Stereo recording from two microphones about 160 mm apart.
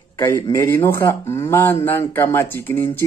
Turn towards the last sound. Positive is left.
turn(degrees=10)  # may be behind; listen again after turning